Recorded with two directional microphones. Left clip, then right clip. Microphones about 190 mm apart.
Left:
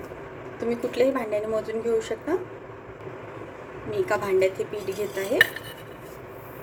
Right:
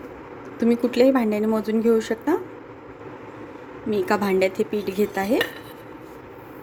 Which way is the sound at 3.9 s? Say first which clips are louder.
Right 3 dB; 55° right (ahead or behind).